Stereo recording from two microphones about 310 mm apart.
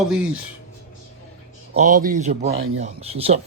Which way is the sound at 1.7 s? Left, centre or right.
Right.